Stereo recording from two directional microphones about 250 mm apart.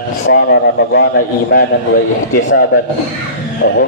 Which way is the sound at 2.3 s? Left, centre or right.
Left.